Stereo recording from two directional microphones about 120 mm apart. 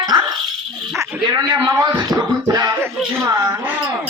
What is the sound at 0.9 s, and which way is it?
Dog, 25° right (ahead or behind).